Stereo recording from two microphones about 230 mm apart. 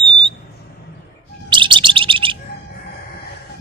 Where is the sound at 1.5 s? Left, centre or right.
Right.